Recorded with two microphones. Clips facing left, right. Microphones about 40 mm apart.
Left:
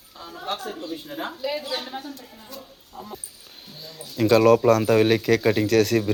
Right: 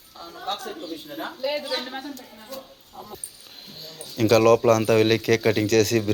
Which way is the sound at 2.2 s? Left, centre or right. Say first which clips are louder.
Right 2 dB; centre.